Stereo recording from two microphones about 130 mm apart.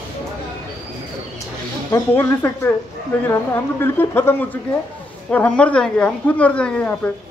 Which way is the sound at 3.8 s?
15° left (ahead or behind).